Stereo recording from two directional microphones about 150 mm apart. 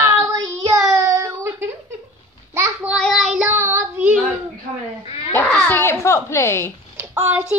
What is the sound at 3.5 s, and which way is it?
Child singing, 15° right (ahead or behind).